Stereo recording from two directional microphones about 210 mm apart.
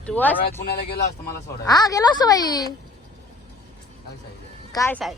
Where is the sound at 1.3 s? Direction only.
15° left (ahead or behind).